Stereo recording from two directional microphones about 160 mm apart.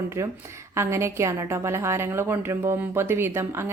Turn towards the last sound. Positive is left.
turn(degrees=-15)  # may be behind; listen again after turning